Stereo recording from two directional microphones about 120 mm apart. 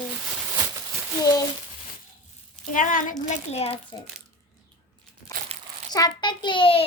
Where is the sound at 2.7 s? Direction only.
90° left.